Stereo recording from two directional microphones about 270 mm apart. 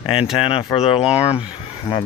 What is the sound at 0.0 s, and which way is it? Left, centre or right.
Speech, centre.